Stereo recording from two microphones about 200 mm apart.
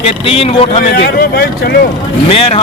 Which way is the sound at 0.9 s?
50° left (ahead or behind).